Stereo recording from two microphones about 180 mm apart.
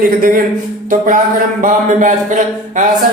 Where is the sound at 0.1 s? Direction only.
55° right (ahead or behind).